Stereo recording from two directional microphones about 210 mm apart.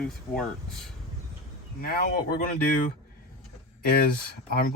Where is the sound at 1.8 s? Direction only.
45° left (ahead or behind).